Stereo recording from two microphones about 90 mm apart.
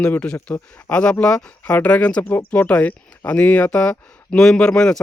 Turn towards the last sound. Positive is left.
turn(degrees=10)  # may be behind; listen again after turning